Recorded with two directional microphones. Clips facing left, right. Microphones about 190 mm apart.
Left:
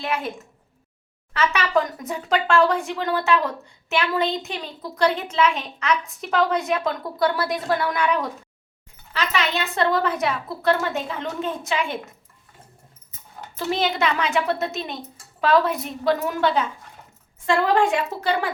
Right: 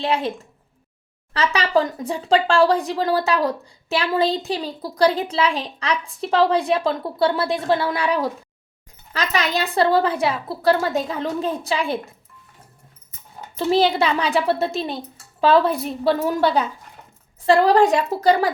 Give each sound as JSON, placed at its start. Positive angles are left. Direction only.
{"t": 0.0, "sound": "speech", "side_deg": -30}
{"t": 13.6, "sound": "speech", "side_deg": -30}